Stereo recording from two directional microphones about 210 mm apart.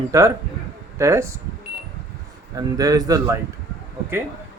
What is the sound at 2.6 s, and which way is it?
Speech, 20° right (ahead or behind).